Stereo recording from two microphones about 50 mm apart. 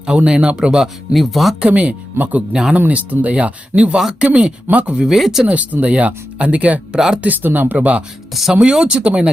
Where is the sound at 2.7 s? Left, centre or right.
Right.